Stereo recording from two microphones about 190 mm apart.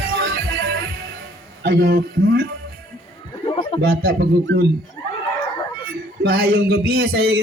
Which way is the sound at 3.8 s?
55° right (ahead or behind).